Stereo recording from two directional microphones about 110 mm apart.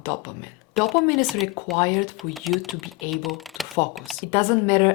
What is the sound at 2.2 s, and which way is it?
Speech, centre (ahead or behind).